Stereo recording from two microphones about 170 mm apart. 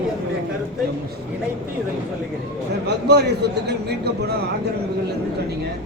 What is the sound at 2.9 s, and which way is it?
A man's voice, 75° right (ahead or behind).